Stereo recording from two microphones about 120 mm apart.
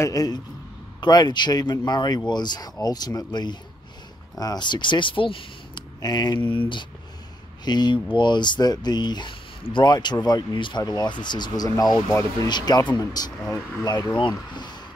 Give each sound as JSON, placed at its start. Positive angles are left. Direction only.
{"t": 0.0, "sound": "speech", "side_deg": 30}
{"t": 5.9, "sound": "speech", "side_deg": 35}
{"t": 7.6, "sound": "speech", "side_deg": 35}